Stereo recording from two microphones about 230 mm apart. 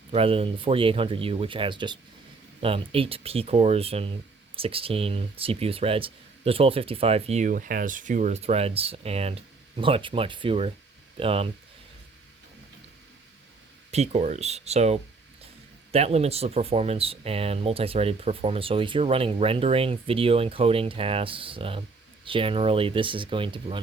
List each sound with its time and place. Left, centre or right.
0.1 s speech: right
13.9 s speech: right